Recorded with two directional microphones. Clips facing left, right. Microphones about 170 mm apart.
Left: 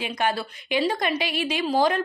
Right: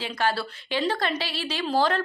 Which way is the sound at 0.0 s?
15° left (ahead or behind).